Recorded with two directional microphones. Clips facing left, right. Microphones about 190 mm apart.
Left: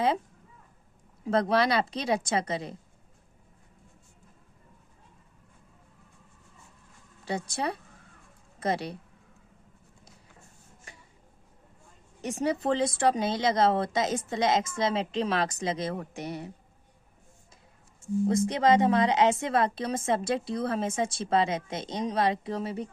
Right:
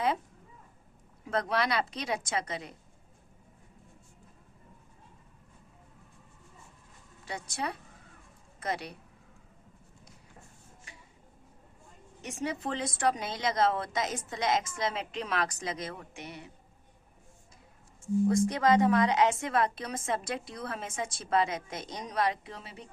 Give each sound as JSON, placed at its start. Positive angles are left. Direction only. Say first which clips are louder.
{"t": 1.3, "sound": "a woman's voice", "louder": "left 6 dB", "side_deg": 30}
{"t": 7.3, "sound": "a woman's voice", "louder": "left 5 dB", "side_deg": 30}
{"t": 12.2, "sound": "a woman's voice", "louder": "left 7 dB", "side_deg": 35}
{"t": 18.3, "sound": "a woman's voice", "louder": "left 3 dB", "side_deg": 20}